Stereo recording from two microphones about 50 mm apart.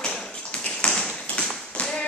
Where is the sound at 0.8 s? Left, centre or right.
Centre.